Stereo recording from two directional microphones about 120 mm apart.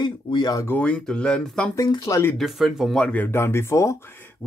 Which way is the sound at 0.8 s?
5° left (ahead or behind).